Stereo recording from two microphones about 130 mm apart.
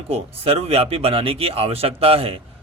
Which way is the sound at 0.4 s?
50° right (ahead or behind).